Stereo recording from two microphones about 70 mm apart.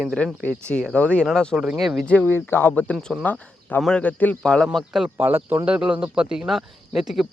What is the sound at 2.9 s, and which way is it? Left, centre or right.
Speech, centre.